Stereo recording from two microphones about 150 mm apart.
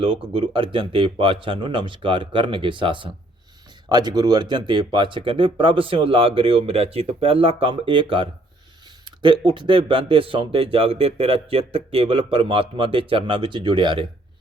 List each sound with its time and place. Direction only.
0.0 s speech: 35° right (ahead or behind)